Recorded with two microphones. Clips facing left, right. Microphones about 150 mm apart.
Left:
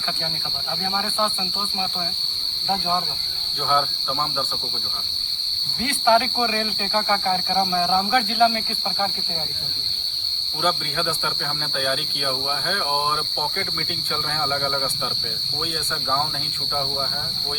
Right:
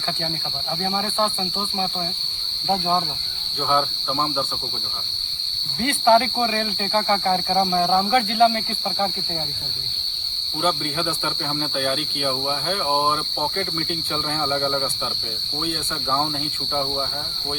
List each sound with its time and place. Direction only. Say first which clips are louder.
6.1 s speech: right 2 dB; 35° right (ahead or behind)